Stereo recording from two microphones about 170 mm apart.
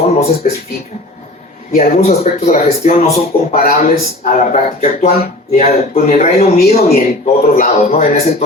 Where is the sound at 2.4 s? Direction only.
40° left (ahead or behind).